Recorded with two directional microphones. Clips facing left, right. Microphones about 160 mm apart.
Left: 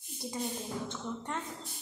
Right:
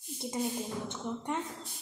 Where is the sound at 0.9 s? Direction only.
15° right (ahead or behind).